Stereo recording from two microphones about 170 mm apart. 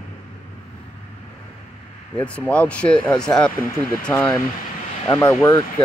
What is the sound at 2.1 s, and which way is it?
Speech, 5° left (ahead or behind).